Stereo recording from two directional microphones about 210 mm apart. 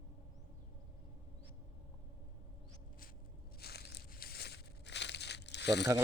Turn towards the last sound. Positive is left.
turn(degrees=55)  # may be behind; listen again after turning